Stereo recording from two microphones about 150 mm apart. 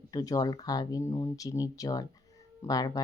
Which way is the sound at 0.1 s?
25° left (ahead or behind).